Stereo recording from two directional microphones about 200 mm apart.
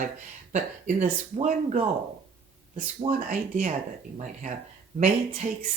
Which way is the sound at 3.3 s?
40° right (ahead or behind).